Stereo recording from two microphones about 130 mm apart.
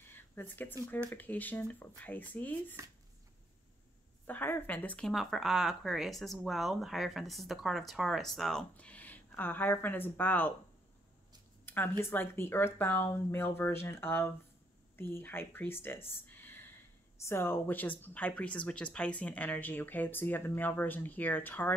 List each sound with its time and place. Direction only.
0.1 s speech: 15° left (ahead or behind)
4.3 s speech: 15° left (ahead or behind)
11.6 s speech: 15° left (ahead or behind)